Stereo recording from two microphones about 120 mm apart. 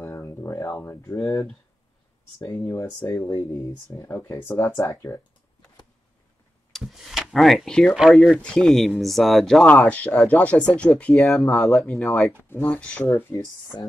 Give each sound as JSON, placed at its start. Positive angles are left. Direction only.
{"t": 0.0, "sound": "a sound", "side_deg": 20}
{"t": 1.1, "sound": "speech", "side_deg": 5}
{"t": 2.4, "sound": "speech", "side_deg": 5}
{"t": 3.2, "sound": "speech", "side_deg": 30}
{"t": 6.7, "sound": "speech", "side_deg": 0}